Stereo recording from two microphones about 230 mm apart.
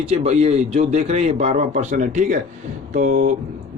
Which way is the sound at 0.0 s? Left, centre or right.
Right.